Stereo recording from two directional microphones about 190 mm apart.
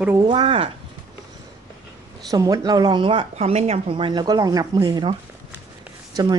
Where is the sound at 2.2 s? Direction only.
20° right (ahead or behind).